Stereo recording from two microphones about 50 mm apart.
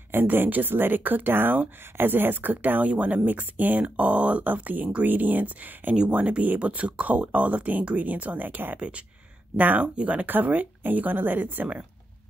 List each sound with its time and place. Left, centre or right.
0.1 s speech: right
8.7 s speech: right
9.6 s speech: right